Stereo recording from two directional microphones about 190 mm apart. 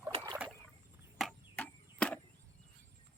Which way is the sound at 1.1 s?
5° left (ahead or behind).